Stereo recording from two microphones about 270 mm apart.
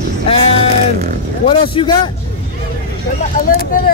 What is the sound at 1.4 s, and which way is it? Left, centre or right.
Speech, centre.